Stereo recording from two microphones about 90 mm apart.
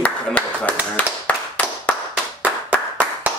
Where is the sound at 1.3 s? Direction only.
15° left (ahead or behind).